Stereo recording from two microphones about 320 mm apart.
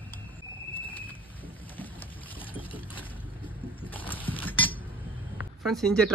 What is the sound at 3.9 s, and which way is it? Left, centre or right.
Horse, centre.